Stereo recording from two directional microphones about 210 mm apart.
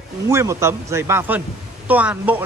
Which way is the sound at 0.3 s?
15° right (ahead or behind).